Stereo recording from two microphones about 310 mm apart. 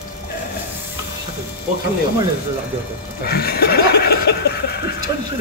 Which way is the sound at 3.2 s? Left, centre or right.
Left.